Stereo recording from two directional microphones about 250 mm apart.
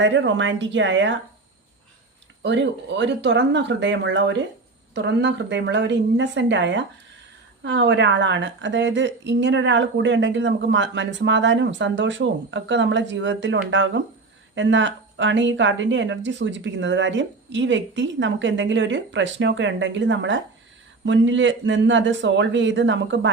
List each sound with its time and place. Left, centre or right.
0.0 s a woman's voice: right
2.4 s a woman's voice: right